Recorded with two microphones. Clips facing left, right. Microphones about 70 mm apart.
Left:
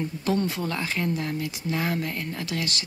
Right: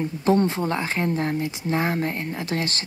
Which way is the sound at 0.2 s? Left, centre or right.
Right.